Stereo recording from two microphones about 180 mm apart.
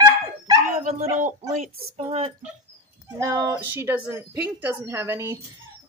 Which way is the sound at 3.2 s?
15° right (ahead or behind).